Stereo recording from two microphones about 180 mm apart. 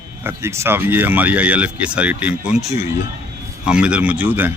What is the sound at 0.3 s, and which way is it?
A man's voice, 15° right (ahead or behind).